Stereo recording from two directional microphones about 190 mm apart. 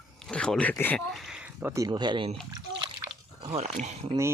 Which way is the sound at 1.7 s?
20° right (ahead or behind).